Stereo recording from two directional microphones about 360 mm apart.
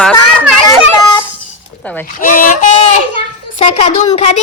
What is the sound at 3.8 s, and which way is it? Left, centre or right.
Speech, left.